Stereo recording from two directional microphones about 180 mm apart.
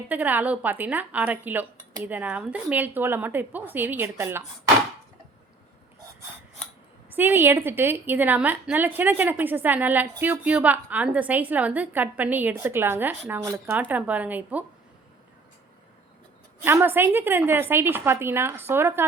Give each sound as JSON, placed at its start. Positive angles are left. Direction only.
{"t": 0.1, "sound": "a woman's voice", "side_deg": -10}
{"t": 7.1, "sound": "a woman's voice", "side_deg": -10}
{"t": 16.6, "sound": "a woman's voice", "side_deg": -10}